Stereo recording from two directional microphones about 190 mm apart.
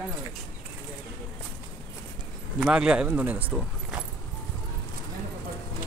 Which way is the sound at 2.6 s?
5° right (ahead or behind).